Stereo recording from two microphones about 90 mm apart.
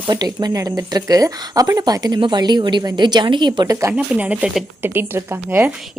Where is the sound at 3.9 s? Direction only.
15° right (ahead or behind).